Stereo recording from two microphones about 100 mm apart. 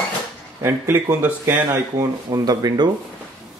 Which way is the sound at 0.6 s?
25° right (ahead or behind).